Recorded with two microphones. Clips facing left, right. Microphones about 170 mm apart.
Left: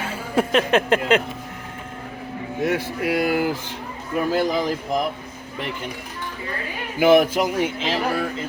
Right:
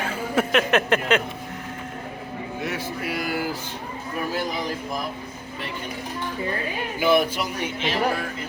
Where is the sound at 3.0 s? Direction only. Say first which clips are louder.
Left 9 dB; 65° left (ahead or behind).